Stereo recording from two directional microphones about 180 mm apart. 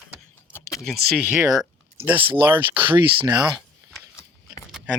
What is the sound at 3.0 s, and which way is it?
Speech, 25° right (ahead or behind).